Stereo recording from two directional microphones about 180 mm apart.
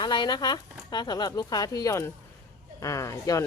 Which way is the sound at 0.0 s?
25° left (ahead or behind).